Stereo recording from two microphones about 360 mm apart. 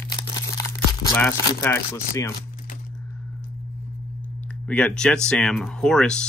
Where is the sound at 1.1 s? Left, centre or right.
Centre.